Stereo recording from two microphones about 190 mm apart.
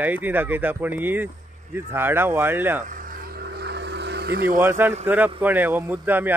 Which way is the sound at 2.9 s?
55° right (ahead or behind).